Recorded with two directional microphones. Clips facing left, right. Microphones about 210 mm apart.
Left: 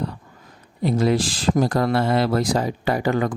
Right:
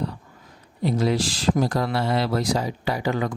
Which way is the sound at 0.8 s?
50° left (ahead or behind).